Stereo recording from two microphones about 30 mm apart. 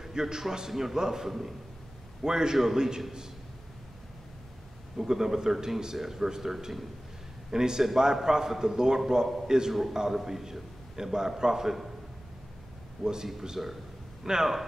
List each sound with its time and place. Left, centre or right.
0.0 s a man's voice: centre
5.0 s a man's voice: centre
7.5 s a man's voice: right
13.0 s a man's voice: right
13.6 s a man's voice: centre
14.2 s a man's voice: centre